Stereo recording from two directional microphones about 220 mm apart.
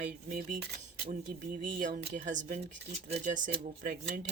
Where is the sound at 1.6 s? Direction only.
35° right (ahead or behind).